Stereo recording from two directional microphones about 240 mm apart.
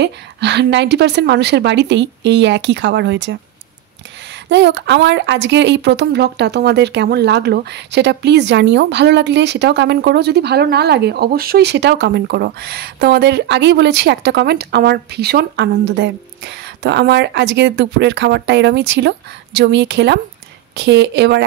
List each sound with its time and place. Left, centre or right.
0.0 s a woman's voice: right
4.5 s a woman's voice: right